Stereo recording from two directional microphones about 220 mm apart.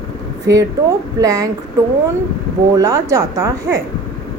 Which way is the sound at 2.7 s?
15° right (ahead or behind).